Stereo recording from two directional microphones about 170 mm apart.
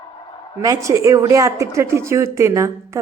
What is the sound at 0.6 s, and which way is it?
A woman's voice, 20° right (ahead or behind).